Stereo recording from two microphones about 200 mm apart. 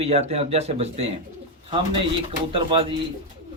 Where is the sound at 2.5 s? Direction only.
30° right (ahead or behind).